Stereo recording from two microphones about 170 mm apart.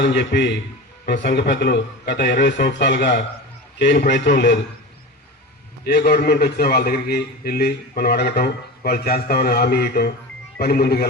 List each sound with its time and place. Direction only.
0.0 s a man's voice: 90° left
5.8 s a man's voice: 70° left (ahead or behind)